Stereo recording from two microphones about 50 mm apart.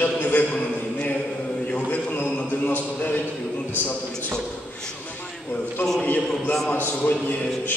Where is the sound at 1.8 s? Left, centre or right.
Left.